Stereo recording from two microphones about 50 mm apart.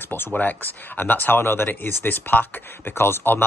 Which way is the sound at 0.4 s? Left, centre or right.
Left.